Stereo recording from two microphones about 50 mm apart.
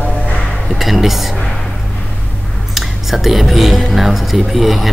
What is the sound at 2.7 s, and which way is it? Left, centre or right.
Speech, centre.